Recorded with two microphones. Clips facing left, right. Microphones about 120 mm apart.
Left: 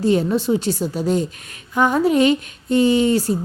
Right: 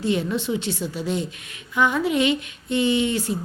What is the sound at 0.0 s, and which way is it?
Speech, 40° left (ahead or behind).